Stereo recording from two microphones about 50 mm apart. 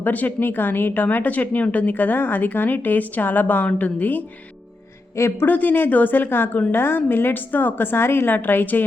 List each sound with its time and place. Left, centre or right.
0.0 s speech: left
5.4 s a woman's voice: left